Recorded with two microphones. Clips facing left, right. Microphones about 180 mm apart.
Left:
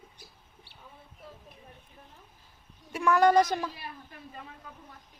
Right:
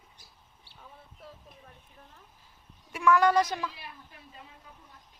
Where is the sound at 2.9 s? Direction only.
40° left (ahead or behind).